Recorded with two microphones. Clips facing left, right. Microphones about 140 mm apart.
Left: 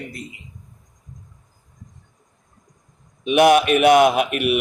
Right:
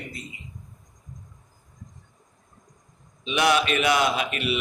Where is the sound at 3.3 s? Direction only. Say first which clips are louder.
Left 8 dB; 55° left (ahead or behind).